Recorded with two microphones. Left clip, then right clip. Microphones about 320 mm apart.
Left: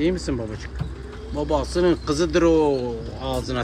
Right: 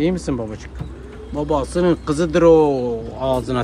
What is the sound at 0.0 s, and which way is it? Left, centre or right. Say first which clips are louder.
Speech: right 3 dB; centre.